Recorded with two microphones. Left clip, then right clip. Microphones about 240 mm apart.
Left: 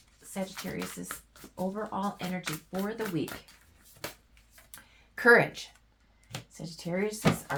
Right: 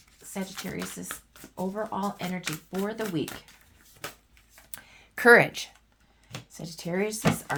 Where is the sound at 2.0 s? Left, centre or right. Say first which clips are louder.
Right 2 dB; right.